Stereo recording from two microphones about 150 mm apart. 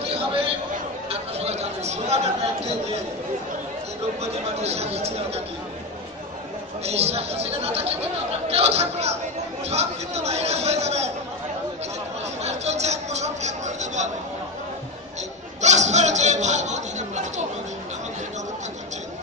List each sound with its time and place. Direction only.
0.1 s a sound: 40° right (ahead or behind)
1.0 s chatter: 45° right (ahead or behind)
4.2 s a man's voice: 45° right (ahead or behind)
6.8 s a man's voice: 45° right (ahead or behind)
12.4 s a sound: 45° right (ahead or behind)
15.6 s chatter: 50° right (ahead or behind)